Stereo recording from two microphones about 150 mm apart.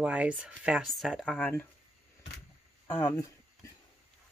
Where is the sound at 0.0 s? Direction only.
10° right (ahead or behind).